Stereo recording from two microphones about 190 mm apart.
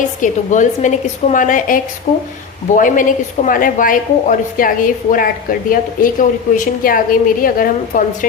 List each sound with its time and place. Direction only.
0.2 s a woman's voice: 40° left (ahead or behind)